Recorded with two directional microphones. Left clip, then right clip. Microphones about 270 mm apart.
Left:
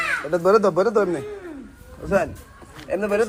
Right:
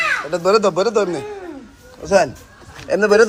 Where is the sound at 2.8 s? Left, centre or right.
Right.